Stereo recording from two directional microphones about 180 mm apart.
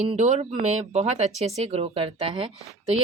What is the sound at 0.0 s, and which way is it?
A woman's voice, 40° right (ahead or behind).